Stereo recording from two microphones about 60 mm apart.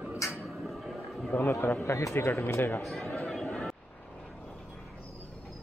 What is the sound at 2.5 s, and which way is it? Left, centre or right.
Speech, left.